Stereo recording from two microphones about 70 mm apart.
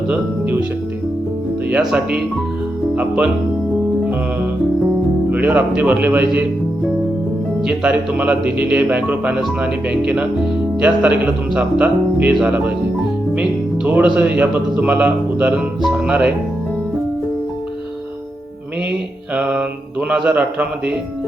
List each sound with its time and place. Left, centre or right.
0.1 s speech: right
1.8 s speech: centre
5.3 s speech: right
7.6 s speech: centre
13.8 s speech: right
15.5 s speech: centre
19.3 s mantra: centre
20.3 s speech: centre